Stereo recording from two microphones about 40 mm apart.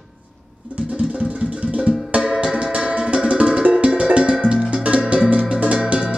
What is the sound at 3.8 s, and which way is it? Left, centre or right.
Cowbell, right.